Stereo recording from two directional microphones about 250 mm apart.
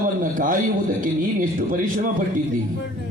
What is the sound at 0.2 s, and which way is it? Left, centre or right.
A man's voice, right.